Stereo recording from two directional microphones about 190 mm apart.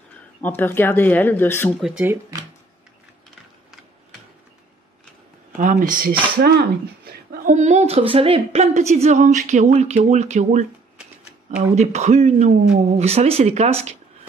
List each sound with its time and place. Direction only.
0.4 s speech: 10° left (ahead or behind)
1.8 s speech: 5° right (ahead or behind)
5.6 s speech: 45° right (ahead or behind)
11.7 s speech: 35° right (ahead or behind)